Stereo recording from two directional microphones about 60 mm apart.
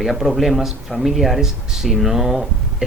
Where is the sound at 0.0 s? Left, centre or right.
Centre.